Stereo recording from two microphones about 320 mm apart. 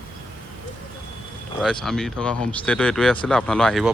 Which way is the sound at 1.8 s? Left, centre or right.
Centre.